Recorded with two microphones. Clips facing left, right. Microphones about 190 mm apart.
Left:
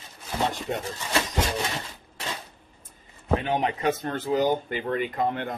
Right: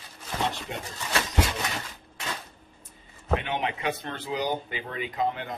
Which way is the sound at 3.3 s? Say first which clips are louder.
Left 4 dB; 40° left (ahead or behind).